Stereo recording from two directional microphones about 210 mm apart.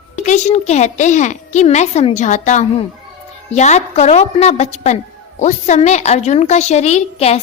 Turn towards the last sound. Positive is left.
turn(degrees=30)  # may be behind; listen again after turning